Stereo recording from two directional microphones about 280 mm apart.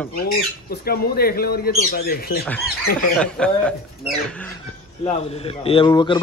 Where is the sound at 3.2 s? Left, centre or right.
Centre.